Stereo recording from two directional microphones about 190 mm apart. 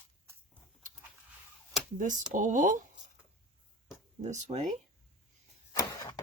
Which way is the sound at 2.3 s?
40° right (ahead or behind).